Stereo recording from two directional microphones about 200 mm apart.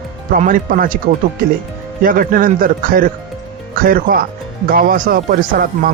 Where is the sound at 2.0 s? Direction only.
45° right (ahead or behind).